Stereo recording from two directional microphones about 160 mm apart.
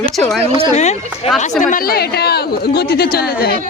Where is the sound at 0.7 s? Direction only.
45° left (ahead or behind).